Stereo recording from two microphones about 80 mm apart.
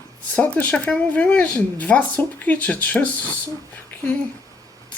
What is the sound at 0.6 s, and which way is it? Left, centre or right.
Speech, centre.